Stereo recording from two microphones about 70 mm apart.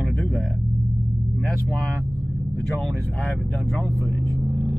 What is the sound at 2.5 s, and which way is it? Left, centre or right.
Speech, centre.